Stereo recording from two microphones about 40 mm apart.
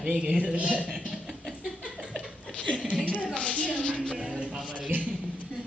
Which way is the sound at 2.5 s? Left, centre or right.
Left.